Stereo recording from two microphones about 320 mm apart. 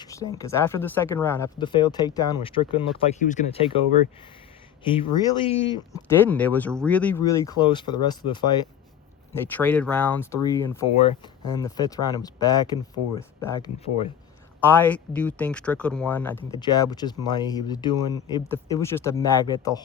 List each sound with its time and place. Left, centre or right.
0.0 s a sound: centre
0.3 s speech: centre
4.8 s speech: centre